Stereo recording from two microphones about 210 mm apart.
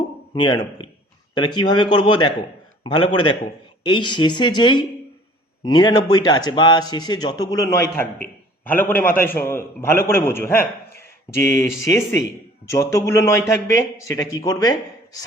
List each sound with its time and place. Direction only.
0.3 s a man's voice: 20° left (ahead or behind)